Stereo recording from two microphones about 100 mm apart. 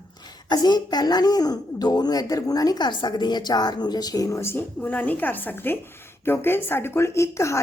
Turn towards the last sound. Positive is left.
turn(degrees=30)  # may be behind; listen again after turning